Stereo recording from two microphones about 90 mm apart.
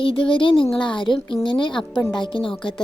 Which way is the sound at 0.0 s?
80° left.